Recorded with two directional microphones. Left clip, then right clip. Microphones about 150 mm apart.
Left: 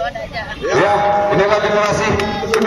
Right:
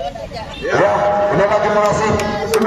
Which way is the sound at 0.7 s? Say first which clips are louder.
Even; 45° right (ahead or behind).